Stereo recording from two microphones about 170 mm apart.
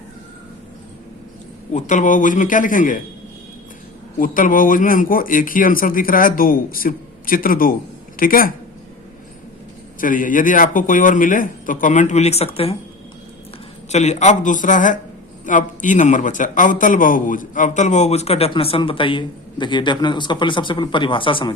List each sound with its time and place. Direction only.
1.7 s a man's voice: 45° left (ahead or behind)
4.2 s speech: 55° left (ahead or behind)
10.0 s a man's voice: 50° left (ahead or behind); by 12.7 s 35° left (ahead or behind)
13.9 s a man's voice: 45° left (ahead or behind)